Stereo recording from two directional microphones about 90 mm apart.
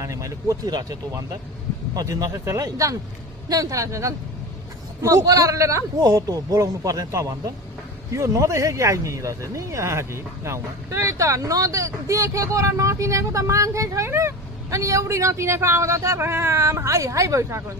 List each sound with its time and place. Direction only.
0.0 s speech: 35° right (ahead or behind)